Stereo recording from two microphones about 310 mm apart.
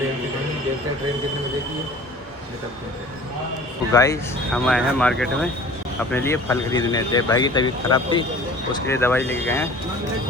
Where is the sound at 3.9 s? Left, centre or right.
Centre.